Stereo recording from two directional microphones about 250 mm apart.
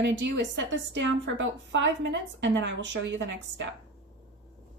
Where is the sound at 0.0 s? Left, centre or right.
Right.